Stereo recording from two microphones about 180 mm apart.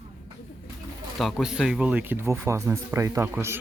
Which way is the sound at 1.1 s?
Centre (ahead or behind).